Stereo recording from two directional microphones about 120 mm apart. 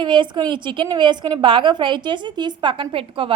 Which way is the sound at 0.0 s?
40° right (ahead or behind).